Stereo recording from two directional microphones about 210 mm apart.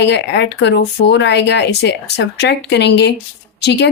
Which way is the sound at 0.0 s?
55° left (ahead or behind).